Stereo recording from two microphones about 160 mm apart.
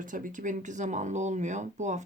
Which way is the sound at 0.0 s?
55° right (ahead or behind).